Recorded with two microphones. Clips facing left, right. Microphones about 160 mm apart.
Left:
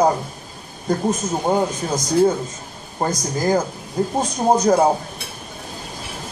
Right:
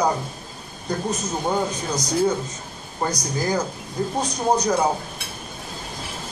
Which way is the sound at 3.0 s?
45° left (ahead or behind).